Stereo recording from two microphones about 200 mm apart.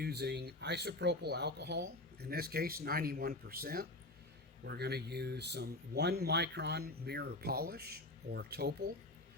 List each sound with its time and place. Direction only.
0.0 s speech: 55° right (ahead or behind)